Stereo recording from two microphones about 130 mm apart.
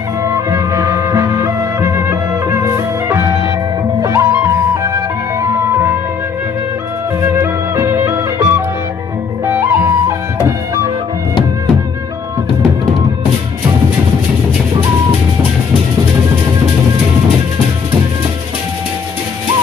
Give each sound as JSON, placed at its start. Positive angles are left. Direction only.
{"t": 0.2, "sound": "music", "side_deg": -25}
{"t": 7.2, "sound": "music", "side_deg": -20}